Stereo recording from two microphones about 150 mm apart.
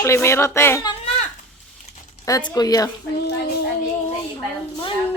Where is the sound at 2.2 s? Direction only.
25° left (ahead or behind).